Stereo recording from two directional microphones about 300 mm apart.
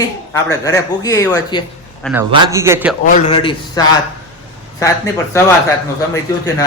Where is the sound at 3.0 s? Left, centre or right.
Left.